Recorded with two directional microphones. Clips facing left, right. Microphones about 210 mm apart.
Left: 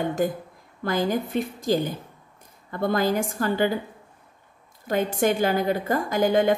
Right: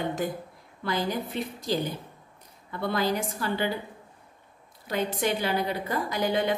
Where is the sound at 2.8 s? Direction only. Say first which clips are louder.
Left 4 dB; 45° left (ahead or behind).